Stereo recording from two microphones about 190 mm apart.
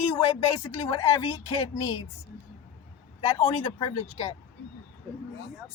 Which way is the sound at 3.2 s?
25° left (ahead or behind).